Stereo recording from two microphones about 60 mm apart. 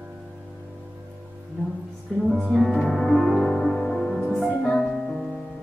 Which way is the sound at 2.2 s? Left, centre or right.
Centre.